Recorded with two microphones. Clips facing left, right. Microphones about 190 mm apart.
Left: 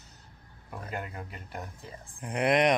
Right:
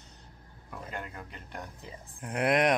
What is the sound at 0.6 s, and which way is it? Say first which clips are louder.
Speech: left 2 dB; 5° left (ahead or behind).